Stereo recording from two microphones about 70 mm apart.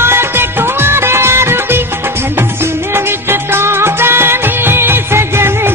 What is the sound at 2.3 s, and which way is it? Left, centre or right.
Music, right.